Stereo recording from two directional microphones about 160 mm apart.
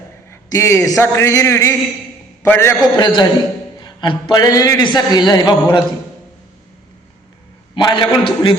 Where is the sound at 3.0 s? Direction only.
25° left (ahead or behind).